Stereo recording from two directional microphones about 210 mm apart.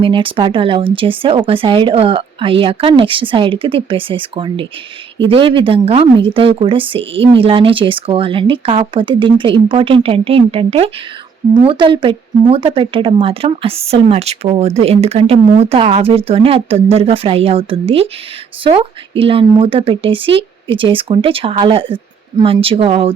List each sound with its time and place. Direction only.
0.0 s speech: 25° right (ahead or behind)